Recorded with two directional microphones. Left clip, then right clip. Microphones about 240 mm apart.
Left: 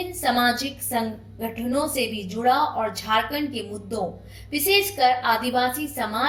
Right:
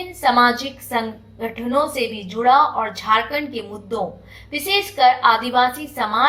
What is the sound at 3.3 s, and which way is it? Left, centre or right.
A woman's voice, right.